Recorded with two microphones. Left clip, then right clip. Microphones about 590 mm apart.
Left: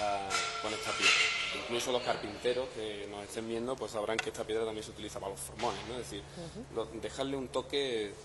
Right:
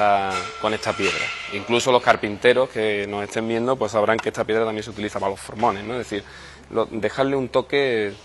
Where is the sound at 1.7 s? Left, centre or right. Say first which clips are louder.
Right 19 dB; right.